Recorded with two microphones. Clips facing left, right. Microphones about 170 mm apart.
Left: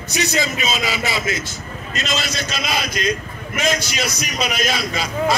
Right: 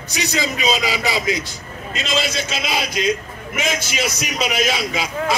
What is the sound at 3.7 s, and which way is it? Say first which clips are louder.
Speech: even; 5° right (ahead or behind).